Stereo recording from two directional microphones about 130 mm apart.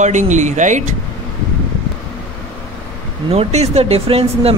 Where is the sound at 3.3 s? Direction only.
55° right (ahead or behind).